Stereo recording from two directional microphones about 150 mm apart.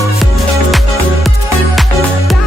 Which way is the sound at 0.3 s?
Centre (ahead or behind).